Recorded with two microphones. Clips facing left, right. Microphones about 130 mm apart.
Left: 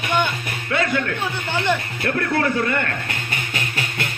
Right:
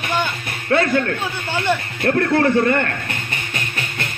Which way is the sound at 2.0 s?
40° right (ahead or behind).